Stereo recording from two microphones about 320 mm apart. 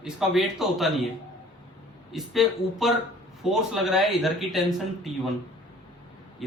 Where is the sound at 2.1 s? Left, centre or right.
Centre.